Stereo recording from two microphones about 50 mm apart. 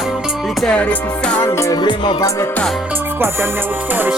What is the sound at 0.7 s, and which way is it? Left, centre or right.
Music, left.